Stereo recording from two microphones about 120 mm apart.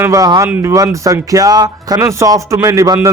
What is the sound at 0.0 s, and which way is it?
Speech, 30° right (ahead or behind).